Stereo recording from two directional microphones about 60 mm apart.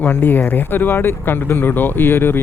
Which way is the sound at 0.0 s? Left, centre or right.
Left.